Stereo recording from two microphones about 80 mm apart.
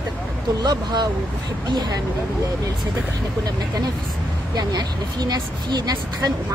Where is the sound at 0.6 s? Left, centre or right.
Right.